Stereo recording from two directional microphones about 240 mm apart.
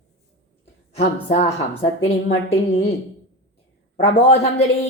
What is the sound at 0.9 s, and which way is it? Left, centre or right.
A woman's voice, left.